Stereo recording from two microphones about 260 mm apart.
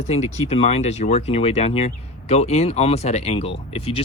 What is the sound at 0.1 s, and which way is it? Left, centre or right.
Speech, left.